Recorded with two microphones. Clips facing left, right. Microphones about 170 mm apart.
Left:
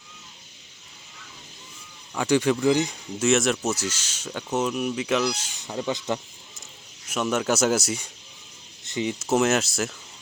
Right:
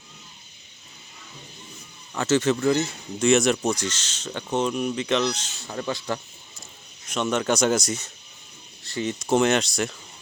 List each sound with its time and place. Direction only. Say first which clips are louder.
2.1 s speech: even; 10° left (ahead or behind)
3.2 s speech: right 2 dB; centre (ahead or behind)
8.8 s cricket: left 1 dB; 20° left (ahead or behind)
9.1 s speech: right 2 dB; 5° left (ahead or behind)